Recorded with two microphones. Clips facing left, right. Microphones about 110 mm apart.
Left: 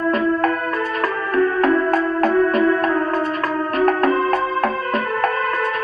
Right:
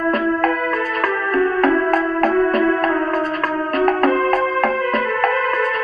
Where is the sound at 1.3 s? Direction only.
50° right (ahead or behind).